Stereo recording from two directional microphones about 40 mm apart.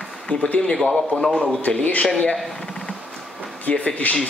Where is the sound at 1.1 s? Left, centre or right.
Centre.